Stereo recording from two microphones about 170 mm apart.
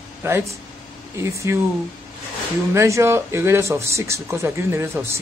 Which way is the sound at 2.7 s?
15° right (ahead or behind).